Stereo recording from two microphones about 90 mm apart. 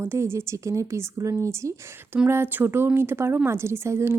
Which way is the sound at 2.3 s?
25° right (ahead or behind).